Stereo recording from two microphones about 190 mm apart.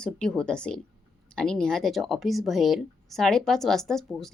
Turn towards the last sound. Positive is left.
turn(degrees=0)  # may be behind; listen again after turning